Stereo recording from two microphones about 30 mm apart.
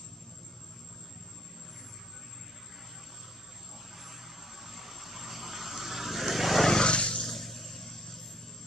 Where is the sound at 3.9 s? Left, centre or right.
Centre.